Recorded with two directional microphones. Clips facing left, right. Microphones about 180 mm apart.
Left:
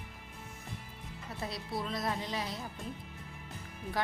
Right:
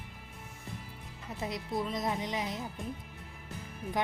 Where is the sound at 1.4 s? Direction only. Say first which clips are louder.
Right 4 dB; 20° right (ahead or behind).